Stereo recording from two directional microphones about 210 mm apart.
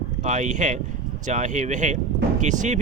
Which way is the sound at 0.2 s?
35° right (ahead or behind).